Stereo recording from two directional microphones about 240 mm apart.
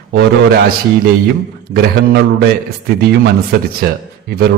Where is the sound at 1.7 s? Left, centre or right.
Right.